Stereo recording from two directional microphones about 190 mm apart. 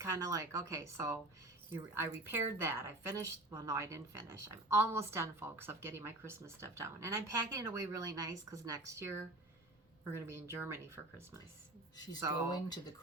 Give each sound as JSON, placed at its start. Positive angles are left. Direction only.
{"t": 0.0, "sound": "a woman's voice", "side_deg": -15}
{"t": 12.5, "sound": "speech", "side_deg": 20}